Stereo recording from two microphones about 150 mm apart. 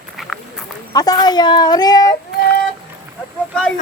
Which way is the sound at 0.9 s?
25° left (ahead or behind).